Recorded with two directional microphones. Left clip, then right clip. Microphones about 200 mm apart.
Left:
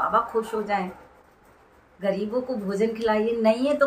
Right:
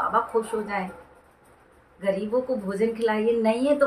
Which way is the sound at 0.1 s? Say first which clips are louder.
Even; 10° left (ahead or behind).